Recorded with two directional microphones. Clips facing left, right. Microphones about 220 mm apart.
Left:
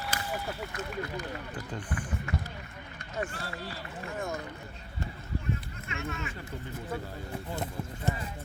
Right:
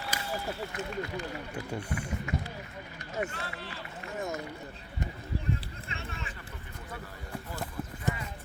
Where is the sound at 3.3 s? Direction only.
40° left (ahead or behind).